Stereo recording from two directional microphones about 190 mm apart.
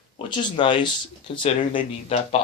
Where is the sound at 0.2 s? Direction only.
25° left (ahead or behind).